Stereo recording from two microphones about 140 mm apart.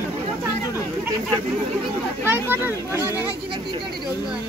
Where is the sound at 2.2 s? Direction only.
15° right (ahead or behind).